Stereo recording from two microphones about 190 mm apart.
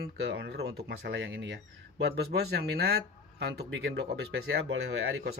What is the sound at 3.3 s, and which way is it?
Speech, 60° right (ahead or behind).